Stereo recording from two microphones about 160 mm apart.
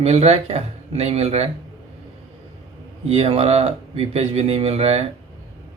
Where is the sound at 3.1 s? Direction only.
40° right (ahead or behind).